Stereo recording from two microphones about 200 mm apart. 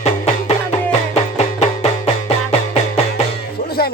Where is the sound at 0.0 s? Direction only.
30° left (ahead or behind).